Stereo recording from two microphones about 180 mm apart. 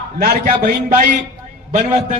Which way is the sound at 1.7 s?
45° right (ahead or behind).